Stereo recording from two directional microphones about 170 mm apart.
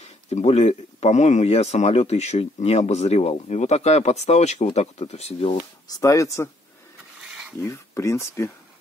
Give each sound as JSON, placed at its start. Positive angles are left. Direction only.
{"t": 0.0, "sound": "speech", "side_deg": 40}
{"t": 5.9, "sound": "speech", "side_deg": 20}
{"t": 7.6, "sound": "speech", "side_deg": 15}